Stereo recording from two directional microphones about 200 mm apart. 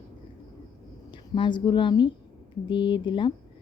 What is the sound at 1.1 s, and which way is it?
A woman's voice, 25° left (ahead or behind).